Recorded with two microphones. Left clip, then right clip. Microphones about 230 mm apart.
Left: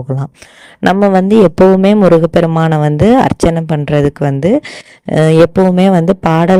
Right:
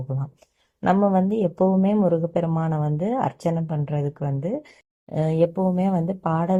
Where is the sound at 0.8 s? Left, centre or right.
Left.